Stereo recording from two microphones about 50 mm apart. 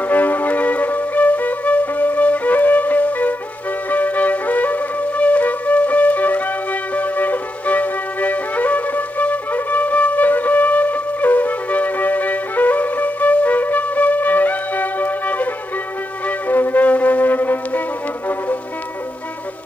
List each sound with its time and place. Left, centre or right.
0.0 s music: left
3.9 s flute: left
16.3 s music: left